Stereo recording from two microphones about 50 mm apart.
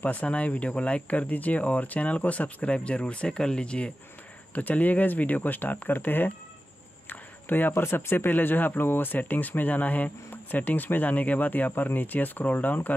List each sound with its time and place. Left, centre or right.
0.0 s speech: left
4.6 s speech: left
7.1 s a sound: left
7.7 s speech: left
8.3 s speech: left